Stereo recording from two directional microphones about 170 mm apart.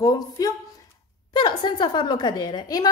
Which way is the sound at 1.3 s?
25° left (ahead or behind).